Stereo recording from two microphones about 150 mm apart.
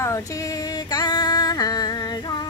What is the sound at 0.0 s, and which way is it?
Music, 20° left (ahead or behind).